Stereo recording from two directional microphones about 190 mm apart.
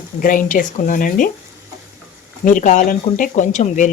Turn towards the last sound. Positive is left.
turn(degrees=40)  # may be behind; listen again after turning